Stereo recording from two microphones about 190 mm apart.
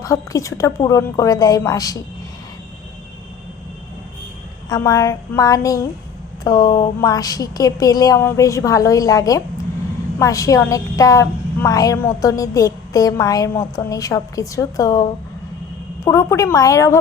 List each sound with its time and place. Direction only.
0.0 s a woman's voice: 15° left (ahead or behind)
4.7 s a woman's voice: 15° left (ahead or behind)
16.0 s a woman's voice: 15° left (ahead or behind)